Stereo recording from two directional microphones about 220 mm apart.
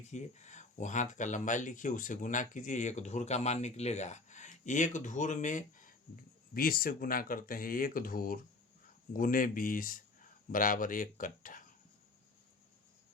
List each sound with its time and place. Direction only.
0.1 s speech: 30° left (ahead or behind)